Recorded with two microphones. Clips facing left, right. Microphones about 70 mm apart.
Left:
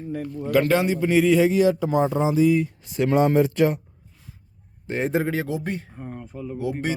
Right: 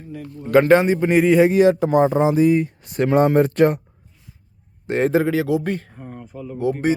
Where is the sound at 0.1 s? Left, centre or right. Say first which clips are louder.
Left 3 dB; left.